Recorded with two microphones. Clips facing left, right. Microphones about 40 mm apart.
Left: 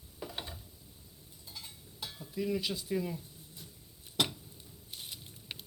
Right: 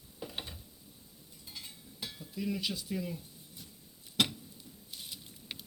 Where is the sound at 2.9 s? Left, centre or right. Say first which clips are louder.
Left 6 dB; centre.